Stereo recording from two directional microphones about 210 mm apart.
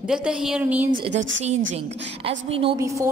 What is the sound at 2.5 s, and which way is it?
Speech, 25° right (ahead or behind).